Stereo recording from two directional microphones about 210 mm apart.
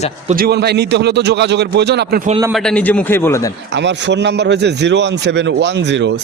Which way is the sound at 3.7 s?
55° right (ahead or behind).